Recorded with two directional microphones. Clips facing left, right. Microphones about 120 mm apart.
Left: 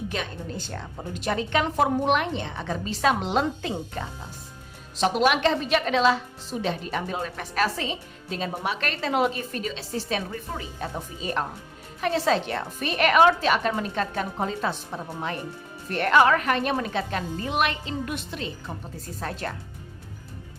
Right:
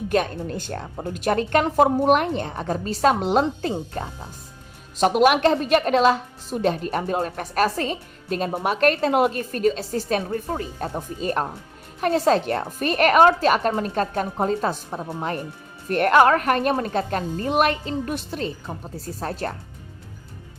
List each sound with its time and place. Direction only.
0.1 s a woman's voice: 50° right (ahead or behind)